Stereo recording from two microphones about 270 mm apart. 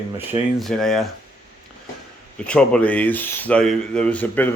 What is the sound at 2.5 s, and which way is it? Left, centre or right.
Speech, centre.